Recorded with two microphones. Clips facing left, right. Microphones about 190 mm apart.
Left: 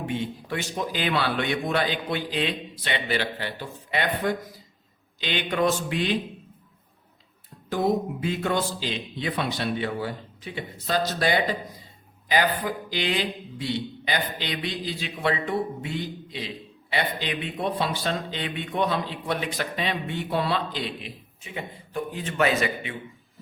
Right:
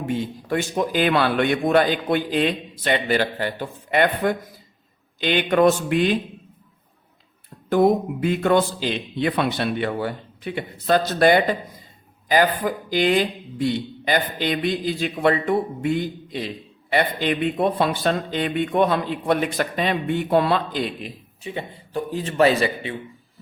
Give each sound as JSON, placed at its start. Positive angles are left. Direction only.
{"t": 0.0, "sound": "a man's voice", "side_deg": -40}
{"t": 7.7, "sound": "a man's voice", "side_deg": -55}
{"t": 21.4, "sound": "a man's voice", "side_deg": -35}